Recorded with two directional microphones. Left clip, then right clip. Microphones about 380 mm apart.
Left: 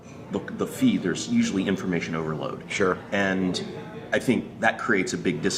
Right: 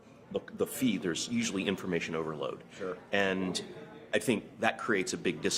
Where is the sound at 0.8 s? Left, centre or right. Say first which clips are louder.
Left 7 dB; right.